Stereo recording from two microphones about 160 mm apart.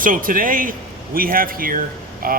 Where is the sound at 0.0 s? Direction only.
60° right (ahead or behind).